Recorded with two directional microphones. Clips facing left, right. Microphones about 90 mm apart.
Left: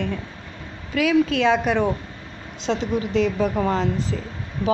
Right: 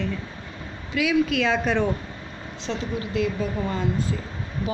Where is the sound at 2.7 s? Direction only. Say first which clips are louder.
Left 6 dB; 70° left (ahead or behind).